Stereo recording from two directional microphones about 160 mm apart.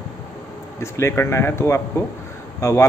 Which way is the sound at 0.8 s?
15° left (ahead or behind).